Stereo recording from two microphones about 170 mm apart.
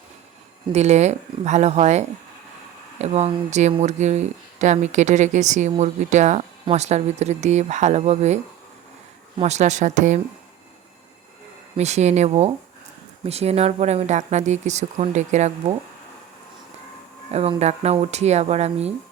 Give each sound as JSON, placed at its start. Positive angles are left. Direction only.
{"t": 0.7, "sound": "speech", "side_deg": -40}
{"t": 9.4, "sound": "speech", "side_deg": -40}
{"t": 11.8, "sound": "speech", "side_deg": -40}
{"t": 17.3, "sound": "speech", "side_deg": -40}